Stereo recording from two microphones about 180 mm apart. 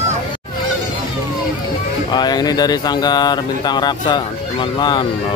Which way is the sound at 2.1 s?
25° left (ahead or behind).